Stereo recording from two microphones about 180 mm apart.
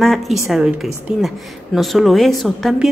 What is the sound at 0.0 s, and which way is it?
A woman's voice, centre (ahead or behind).